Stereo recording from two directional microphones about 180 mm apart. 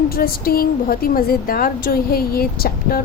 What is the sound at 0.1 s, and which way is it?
A woman's voice, 55° left (ahead or behind).